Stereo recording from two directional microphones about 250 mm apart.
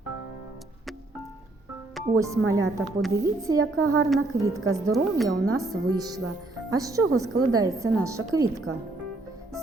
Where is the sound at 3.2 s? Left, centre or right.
Centre.